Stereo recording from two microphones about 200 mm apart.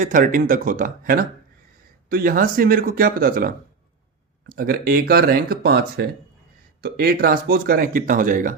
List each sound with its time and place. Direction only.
0.0 s speech: 40° right (ahead or behind)